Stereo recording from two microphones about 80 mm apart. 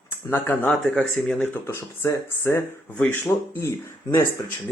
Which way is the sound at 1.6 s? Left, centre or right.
Left.